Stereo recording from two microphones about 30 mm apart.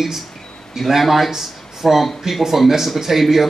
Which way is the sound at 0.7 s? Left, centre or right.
Centre.